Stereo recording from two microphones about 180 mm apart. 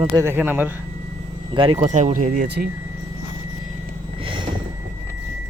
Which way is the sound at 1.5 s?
30° right (ahead or behind).